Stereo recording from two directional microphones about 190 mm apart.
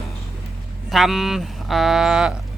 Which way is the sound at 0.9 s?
Centre (ahead or behind).